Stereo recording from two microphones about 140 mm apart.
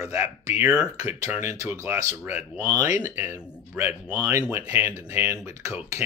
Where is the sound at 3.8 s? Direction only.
10° right (ahead or behind).